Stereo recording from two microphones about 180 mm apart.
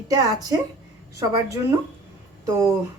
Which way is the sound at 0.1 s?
20° right (ahead or behind).